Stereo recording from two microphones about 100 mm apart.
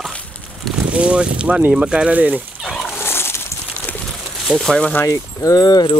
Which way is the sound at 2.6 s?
Centre (ahead or behind).